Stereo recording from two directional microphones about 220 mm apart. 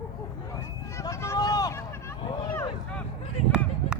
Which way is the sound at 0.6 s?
15° left (ahead or behind).